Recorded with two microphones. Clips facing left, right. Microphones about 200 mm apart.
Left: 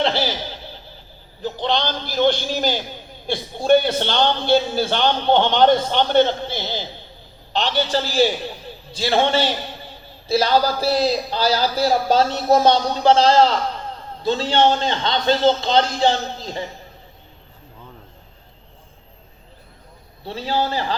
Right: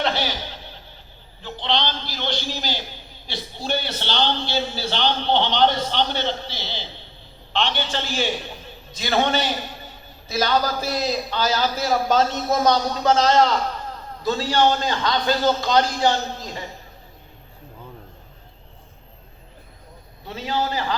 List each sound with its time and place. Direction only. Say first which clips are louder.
0.0 s a sound: left 3 dB; 30° left (ahead or behind)
1.4 s a man's voice: left 3 dB; 40° left (ahead or behind)
20.2 s a man's voice: left 3 dB; 30° left (ahead or behind)